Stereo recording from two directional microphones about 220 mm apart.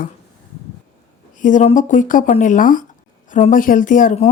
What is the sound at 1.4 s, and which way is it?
A woman's voice, 35° left (ahead or behind).